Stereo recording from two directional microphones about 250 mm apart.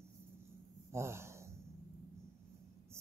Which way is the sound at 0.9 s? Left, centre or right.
Centre.